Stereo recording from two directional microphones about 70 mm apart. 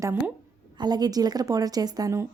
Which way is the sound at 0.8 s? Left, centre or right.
Right.